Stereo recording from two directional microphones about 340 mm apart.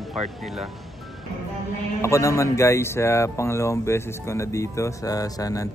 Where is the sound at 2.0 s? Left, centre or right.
Centre.